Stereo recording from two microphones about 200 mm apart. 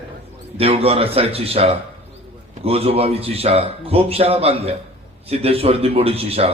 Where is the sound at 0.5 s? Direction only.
30° right (ahead or behind).